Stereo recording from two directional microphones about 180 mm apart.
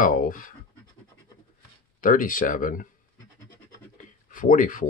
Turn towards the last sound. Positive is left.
turn(degrees=50)  # may be behind; listen again after turning